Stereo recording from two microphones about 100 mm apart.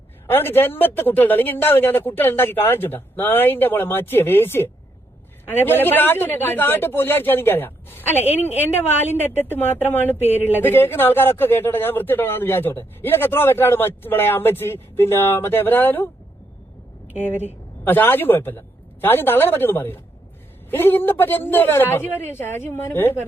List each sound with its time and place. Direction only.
0.3 s speech: 20° left (ahead or behind)
17.2 s speech: 20° left (ahead or behind)